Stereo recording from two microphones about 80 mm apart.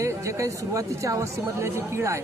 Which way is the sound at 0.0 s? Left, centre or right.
Right.